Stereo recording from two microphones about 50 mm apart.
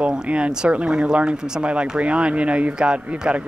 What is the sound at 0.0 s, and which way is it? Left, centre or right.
Speech, right.